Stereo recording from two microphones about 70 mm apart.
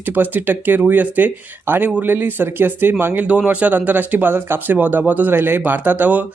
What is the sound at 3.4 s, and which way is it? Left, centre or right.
Speech, centre.